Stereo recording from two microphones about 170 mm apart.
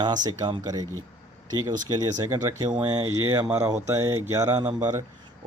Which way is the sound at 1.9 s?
25° right (ahead or behind).